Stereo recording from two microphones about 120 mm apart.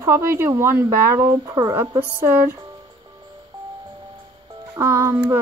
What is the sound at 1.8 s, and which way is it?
Speech, 20° right (ahead or behind).